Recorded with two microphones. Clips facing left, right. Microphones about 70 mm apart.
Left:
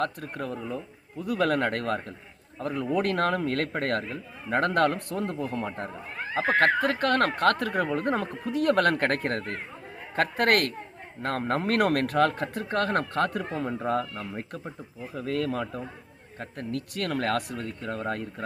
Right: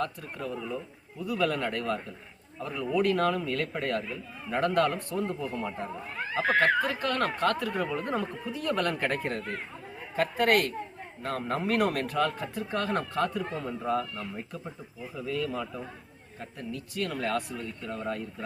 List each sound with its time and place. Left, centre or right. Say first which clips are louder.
0.0 s speech: left 3 dB; left
6.3 s speech: left 1 dB; left
6.8 s speech: left 5 dB; left
13.4 s speech: left 3 dB; left
15.1 s speech: left 3 dB; left